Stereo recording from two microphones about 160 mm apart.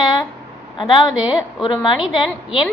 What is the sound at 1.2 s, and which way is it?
Speech, 5° right (ahead or behind).